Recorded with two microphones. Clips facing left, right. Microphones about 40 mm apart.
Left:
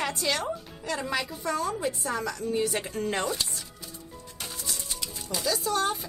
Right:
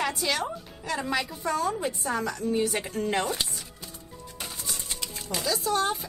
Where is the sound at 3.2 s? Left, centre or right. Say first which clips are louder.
Even; right.